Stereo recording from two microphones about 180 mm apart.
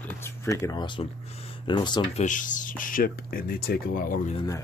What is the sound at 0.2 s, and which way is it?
Speech, 15° left (ahead or behind).